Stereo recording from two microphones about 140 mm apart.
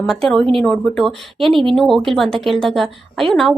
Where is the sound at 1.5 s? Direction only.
40° right (ahead or behind).